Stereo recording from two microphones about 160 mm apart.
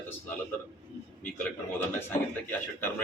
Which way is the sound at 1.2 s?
10° left (ahead or behind).